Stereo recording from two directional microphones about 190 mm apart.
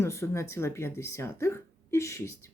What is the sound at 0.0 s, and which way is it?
Speech, 15° left (ahead or behind).